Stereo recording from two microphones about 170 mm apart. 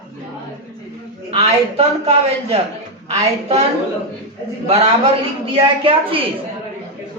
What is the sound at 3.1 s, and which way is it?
Speech, 35° right (ahead or behind).